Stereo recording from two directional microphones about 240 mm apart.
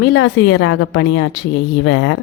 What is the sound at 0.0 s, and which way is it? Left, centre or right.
A woman's voice, left.